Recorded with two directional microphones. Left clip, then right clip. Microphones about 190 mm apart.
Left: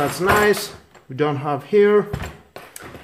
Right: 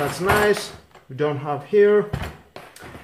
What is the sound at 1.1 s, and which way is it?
Speech, 50° left (ahead or behind).